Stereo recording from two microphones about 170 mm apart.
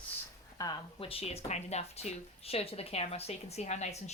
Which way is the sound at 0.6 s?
30° left (ahead or behind).